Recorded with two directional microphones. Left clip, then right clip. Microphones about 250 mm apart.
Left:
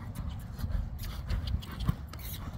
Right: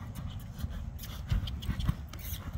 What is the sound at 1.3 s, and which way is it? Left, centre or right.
Pant, centre.